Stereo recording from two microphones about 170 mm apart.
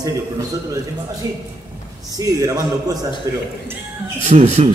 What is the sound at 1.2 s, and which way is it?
A man's voice, 20° right (ahead or behind).